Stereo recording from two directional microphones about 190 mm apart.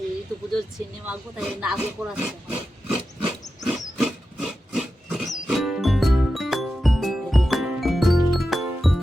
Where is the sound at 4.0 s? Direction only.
Centre (ahead or behind).